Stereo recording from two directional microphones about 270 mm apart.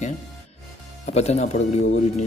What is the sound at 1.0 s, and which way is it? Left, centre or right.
Speech, left.